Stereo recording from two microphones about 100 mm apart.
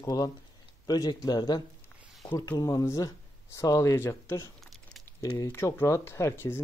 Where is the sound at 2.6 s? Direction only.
35° left (ahead or behind).